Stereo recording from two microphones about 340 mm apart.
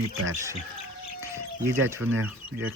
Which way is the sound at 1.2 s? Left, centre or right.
Centre.